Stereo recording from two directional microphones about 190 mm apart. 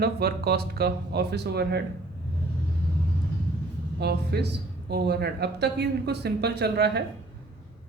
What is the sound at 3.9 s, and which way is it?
Speech, 60° right (ahead or behind).